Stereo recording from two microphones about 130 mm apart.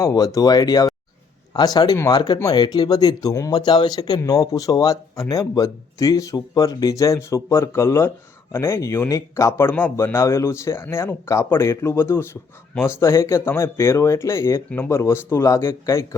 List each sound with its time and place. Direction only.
0.0 s speech: 25° left (ahead or behind)